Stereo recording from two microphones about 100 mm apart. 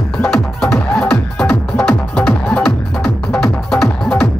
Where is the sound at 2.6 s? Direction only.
Centre (ahead or behind).